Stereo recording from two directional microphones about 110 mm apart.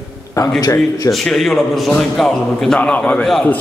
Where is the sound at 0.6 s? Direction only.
30° left (ahead or behind).